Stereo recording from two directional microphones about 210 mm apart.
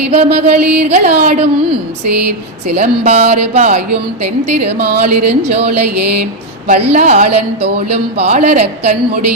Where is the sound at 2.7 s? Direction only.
30° right (ahead or behind).